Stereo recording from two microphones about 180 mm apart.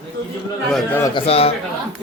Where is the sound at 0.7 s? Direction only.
Centre (ahead or behind).